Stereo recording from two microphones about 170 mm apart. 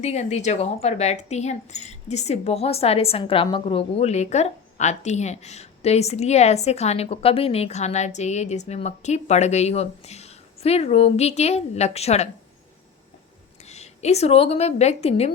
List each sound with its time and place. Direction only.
0.0 s a woman's voice: 40° left (ahead or behind)
13.7 s a woman's voice: 40° left (ahead or behind)